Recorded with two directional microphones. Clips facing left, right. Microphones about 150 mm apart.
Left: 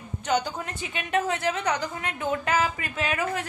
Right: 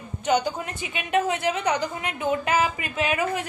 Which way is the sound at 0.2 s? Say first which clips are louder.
Right 3 dB; 15° right (ahead or behind).